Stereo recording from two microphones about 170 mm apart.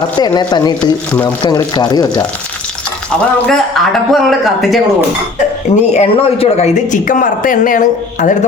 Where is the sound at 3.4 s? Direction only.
Centre (ahead or behind).